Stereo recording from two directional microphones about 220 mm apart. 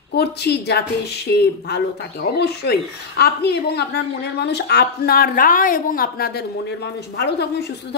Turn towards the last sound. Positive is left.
turn(degrees=50)  # may be behind; listen again after turning